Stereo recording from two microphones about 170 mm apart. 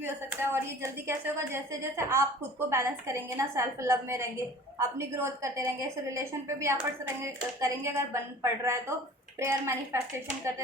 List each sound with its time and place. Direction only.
0.0 s a woman's voice: 15° right (ahead or behind)